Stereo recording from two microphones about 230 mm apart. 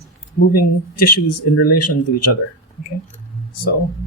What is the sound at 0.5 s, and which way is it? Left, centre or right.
Speech, left.